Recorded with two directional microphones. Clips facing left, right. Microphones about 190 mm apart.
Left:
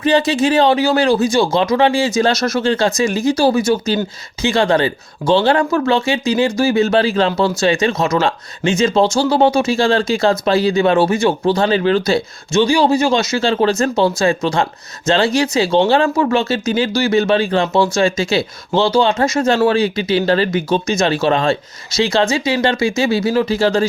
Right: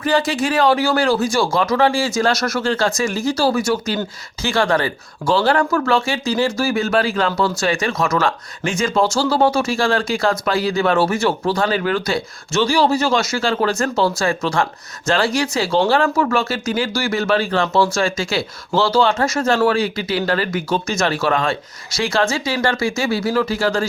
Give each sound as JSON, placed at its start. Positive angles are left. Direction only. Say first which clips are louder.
{"t": 0.0, "sound": "speech", "louder": "left 4 dB", "side_deg": 20}
{"t": 12.5, "sound": "speech", "louder": "left 3 dB", "side_deg": 15}